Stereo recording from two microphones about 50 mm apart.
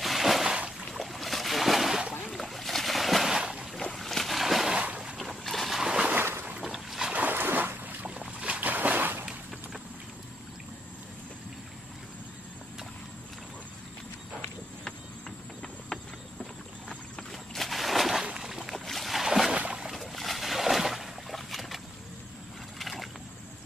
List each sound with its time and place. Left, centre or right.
0.0 s a sound: centre
0.9 s boat: centre
2.2 s boat: centre
3.7 s boat: centre
4.7 s boat: centre
5.1 s boat: centre
5.8 s a sound: centre
6.6 s boat: centre
7.3 s a sound: right
8.0 s boat: right
14.9 s horse: centre
17.3 s a sound: centre
18.4 s boat: centre